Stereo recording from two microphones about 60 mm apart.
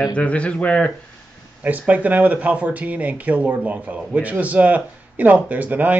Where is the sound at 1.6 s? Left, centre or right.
Right.